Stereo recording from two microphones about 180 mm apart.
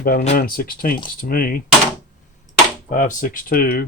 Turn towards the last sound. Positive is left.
turn(degrees=55)  # may be behind; listen again after turning